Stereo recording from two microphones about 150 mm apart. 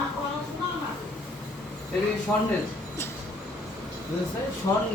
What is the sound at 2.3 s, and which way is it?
Speech, 15° left (ahead or behind).